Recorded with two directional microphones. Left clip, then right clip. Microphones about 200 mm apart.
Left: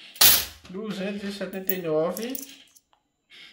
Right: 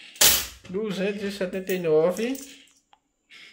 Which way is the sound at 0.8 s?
40° right (ahead or behind).